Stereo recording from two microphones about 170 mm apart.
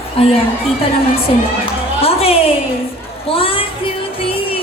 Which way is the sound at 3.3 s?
35° left (ahead or behind).